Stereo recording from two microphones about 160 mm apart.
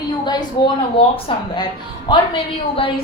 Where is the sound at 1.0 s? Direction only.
35° left (ahead or behind).